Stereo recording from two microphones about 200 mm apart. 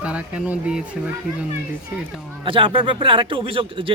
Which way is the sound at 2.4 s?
25° right (ahead or behind).